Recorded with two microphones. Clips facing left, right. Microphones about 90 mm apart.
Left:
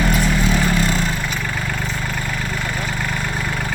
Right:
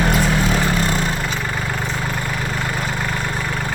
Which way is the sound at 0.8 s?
35° right (ahead or behind).